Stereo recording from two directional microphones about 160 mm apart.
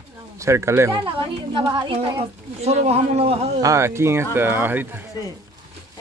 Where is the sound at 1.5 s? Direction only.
30° right (ahead or behind).